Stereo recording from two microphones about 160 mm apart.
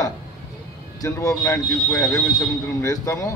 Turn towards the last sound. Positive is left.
turn(degrees=20)  # may be behind; listen again after turning